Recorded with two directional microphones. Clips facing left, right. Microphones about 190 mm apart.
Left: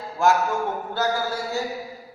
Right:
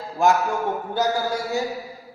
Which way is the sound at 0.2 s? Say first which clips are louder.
Right 1 dB; 15° right (ahead or behind).